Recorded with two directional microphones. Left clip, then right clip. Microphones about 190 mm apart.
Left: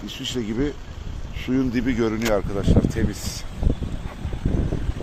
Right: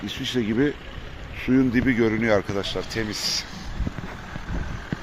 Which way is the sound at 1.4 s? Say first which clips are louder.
Right 3 dB; 20° right (ahead or behind).